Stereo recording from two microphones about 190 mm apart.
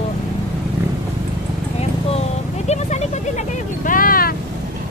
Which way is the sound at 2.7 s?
35° left (ahead or behind).